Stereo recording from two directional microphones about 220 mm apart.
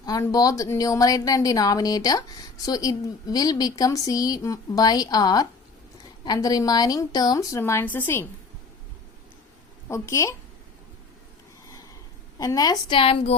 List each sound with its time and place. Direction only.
0.0 s a woman's voice: 15° left (ahead or behind)
9.9 s a woman's voice: 15° left (ahead or behind)
12.4 s a woman's voice: 15° left (ahead or behind)